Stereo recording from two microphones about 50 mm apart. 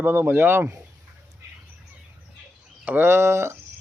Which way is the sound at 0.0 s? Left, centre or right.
Right.